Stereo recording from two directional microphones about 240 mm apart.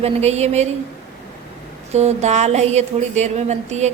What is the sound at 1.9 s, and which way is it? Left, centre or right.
Speech, right.